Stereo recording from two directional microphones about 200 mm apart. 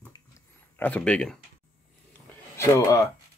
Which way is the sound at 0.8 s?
5° left (ahead or behind).